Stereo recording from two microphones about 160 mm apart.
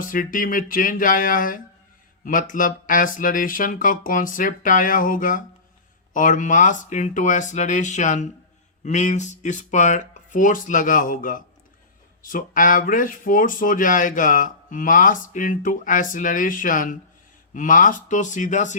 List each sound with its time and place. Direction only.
0.0 s speech: 60° left (ahead or behind)